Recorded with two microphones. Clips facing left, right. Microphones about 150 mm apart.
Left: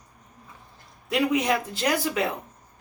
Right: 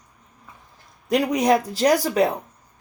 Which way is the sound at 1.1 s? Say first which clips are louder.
Right 5 dB; 40° right (ahead or behind).